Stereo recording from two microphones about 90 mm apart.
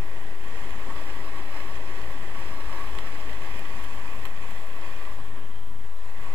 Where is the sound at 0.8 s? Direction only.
25° right (ahead or behind).